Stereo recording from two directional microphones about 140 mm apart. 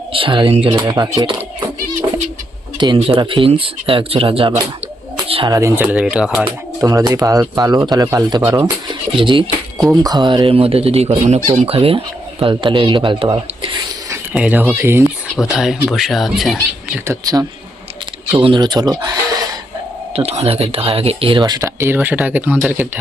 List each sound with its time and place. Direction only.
0.1 s speech: 40° right (ahead or behind)
0.9 s speech: 30° right (ahead or behind)
2.7 s speech: 35° right (ahead or behind)
5.1 s a sound: 40° right (ahead or behind)
5.5 s speech: 20° right (ahead or behind); by 6.4 s 5° right (ahead or behind)
6.8 s speech: 25° right (ahead or behind)
9.1 s speech: 35° right (ahead or behind)
14.3 s speech: 10° right (ahead or behind)
15.4 s speech: 5° right (ahead or behind)
17.1 s speech: 25° right (ahead or behind)
18.3 s speech: 40° right (ahead or behind)
20.1 s speech: 45° right (ahead or behind); by 22.9 s 10° right (ahead or behind)